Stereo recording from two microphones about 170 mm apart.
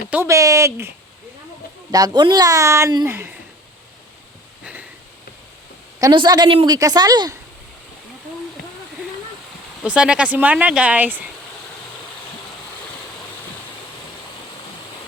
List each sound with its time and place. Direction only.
0.1 s speech: 15° right (ahead or behind)
4.6 s sniff: 5° right (ahead or behind)
6.0 s speech: 25° right (ahead or behind)
9.8 s speech: 5° right (ahead or behind)